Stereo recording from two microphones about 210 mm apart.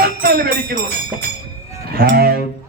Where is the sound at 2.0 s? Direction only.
50° right (ahead or behind).